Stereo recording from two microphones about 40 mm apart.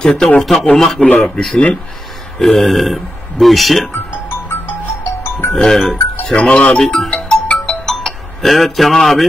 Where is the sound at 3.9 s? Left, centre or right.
Left.